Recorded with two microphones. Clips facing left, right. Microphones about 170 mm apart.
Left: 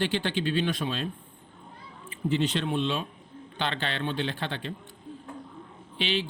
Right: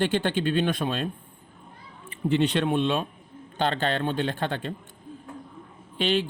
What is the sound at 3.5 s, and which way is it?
Speech, 45° right (ahead or behind).